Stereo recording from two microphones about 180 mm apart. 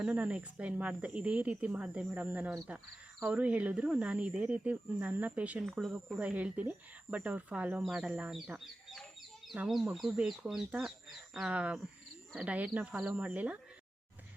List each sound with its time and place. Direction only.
0.0 s speech: 5° right (ahead or behind)